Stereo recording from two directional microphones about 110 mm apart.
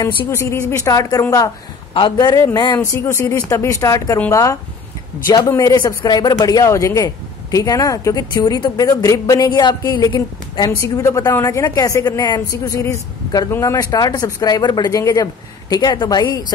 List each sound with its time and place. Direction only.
0.0 s speech: 25° left (ahead or behind)
2.0 s a woman's voice: 45° left (ahead or behind)
2.8 s a woman's voice: 20° left (ahead or behind); by 10.7 s 40° left (ahead or behind)
10.8 s a woman's voice: 30° left (ahead or behind)